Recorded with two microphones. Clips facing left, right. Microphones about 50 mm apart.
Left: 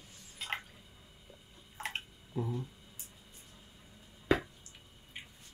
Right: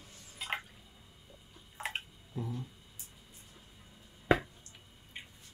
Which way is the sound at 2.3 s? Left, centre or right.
Centre.